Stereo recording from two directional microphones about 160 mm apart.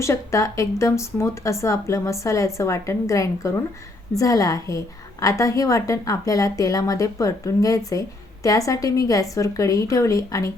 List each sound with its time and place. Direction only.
0.0 s a woman's voice: 20° left (ahead or behind)